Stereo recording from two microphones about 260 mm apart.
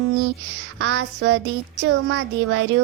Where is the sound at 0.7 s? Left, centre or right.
Right.